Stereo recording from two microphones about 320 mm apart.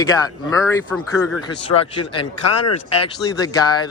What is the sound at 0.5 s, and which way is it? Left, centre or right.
A man's voice, centre.